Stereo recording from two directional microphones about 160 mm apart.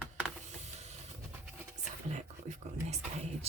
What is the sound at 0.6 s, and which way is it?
Vehicle, 45° right (ahead or behind).